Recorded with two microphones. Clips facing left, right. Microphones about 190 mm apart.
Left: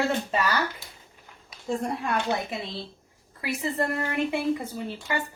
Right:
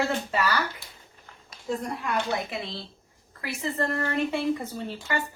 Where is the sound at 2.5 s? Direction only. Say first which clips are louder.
Left 1 dB; 15° left (ahead or behind).